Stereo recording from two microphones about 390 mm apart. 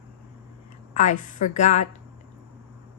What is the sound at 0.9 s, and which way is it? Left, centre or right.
Speech, centre.